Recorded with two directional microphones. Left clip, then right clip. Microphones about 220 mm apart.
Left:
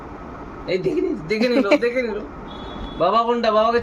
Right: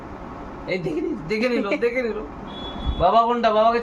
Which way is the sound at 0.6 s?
Centre (ahead or behind).